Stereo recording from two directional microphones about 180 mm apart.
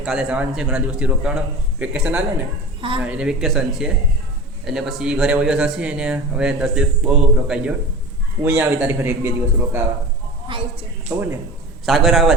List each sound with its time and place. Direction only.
0.0 s a man's voice: 5° right (ahead or behind)
10.5 s a woman's voice: 30° right (ahead or behind)
11.1 s a man's voice: 15° right (ahead or behind)
11.9 s speech: centre (ahead or behind)